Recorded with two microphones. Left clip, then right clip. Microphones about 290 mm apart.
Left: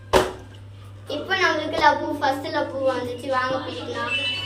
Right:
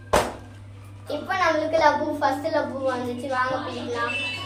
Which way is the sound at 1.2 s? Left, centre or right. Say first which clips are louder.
Left 1 dB; right.